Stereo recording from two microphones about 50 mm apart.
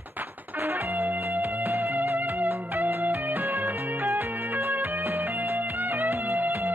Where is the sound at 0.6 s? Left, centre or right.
Right.